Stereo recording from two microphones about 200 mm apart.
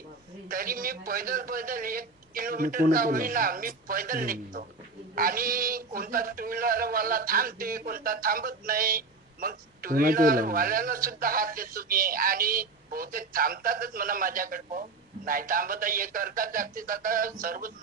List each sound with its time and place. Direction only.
0.4 s speech: 45° right (ahead or behind)